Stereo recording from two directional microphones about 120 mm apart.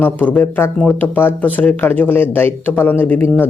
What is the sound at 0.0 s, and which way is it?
Speech, 10° left (ahead or behind).